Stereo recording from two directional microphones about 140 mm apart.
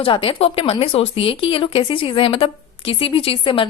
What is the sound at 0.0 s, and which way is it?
Speech, 40° left (ahead or behind).